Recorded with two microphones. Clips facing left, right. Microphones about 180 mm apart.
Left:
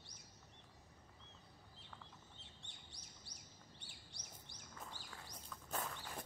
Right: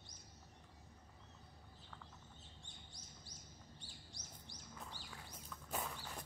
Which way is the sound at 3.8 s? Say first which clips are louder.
Right 3 dB; 65° left (ahead or behind).